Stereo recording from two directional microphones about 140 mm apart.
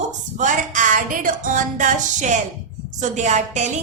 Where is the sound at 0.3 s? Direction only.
65° right (ahead or behind).